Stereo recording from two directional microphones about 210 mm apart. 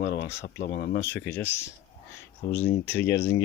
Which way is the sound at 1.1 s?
10° left (ahead or behind).